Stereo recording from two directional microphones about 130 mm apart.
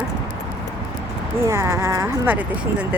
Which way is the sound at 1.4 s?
25° right (ahead or behind).